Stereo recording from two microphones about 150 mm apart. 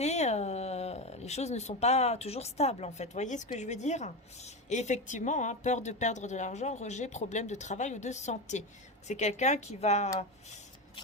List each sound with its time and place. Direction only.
0.0 s speech: 50° left (ahead or behind)